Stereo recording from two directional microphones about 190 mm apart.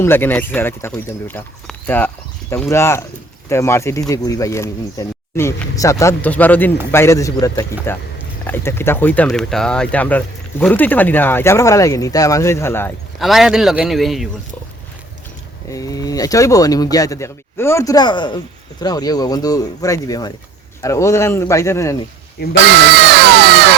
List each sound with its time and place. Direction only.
0.0 s speech: 10° left (ahead or behind)
13.1 s a man's voice: centre (ahead or behind)
15.7 s speech: 20° left (ahead or behind)
23.0 s crowd: 60° right (ahead or behind)